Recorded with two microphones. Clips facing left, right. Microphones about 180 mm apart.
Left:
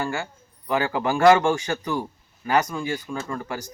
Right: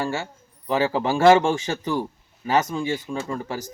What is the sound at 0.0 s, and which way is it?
Speech, 25° right (ahead or behind).